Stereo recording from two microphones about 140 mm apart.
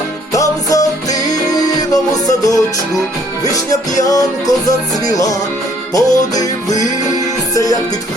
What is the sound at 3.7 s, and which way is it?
Music, 25° left (ahead or behind).